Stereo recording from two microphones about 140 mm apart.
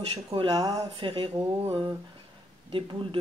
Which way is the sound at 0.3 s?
25° right (ahead or behind).